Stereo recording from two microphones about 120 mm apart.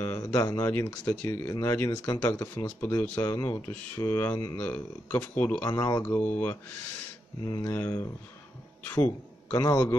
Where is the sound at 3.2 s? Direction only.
30° left (ahead or behind).